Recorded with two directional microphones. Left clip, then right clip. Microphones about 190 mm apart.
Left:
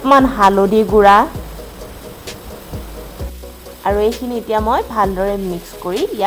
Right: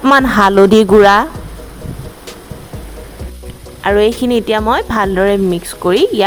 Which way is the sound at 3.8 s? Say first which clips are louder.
Right 5 dB; 45° right (ahead or behind).